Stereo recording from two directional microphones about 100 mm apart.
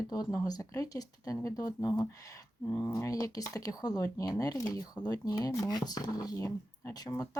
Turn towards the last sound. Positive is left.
turn(degrees=40)  # may be behind; listen again after turning